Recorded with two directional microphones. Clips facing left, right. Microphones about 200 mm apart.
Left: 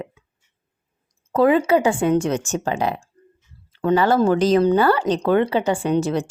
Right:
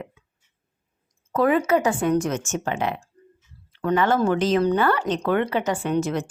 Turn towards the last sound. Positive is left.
turn(degrees=35)  # may be behind; listen again after turning